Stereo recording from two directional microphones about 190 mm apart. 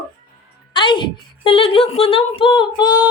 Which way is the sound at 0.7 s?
25° left (ahead or behind).